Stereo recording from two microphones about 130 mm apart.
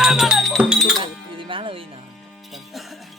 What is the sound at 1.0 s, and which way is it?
Music, 40° right (ahead or behind).